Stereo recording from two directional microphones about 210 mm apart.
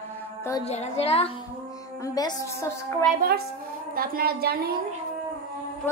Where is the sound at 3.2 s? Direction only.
50° right (ahead or behind).